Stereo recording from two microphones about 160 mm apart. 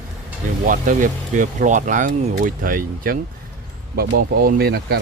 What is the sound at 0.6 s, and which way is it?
Speech, 55° right (ahead or behind).